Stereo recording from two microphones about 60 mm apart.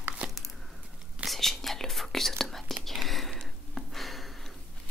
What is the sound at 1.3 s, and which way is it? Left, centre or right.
Whispering, centre.